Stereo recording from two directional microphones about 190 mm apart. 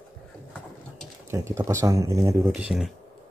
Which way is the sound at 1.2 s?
15° right (ahead or behind).